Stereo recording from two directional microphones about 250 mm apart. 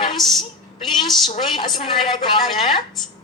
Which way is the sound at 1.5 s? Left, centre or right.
Centre.